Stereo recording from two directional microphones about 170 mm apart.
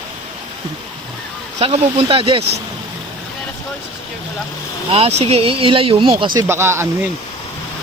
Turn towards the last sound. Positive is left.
turn(degrees=-15)  # may be behind; listen again after turning